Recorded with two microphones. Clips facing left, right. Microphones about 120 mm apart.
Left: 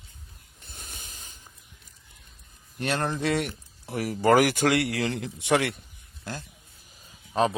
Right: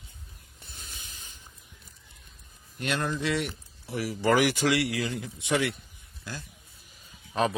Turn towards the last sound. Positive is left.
turn(degrees=30)  # may be behind; listen again after turning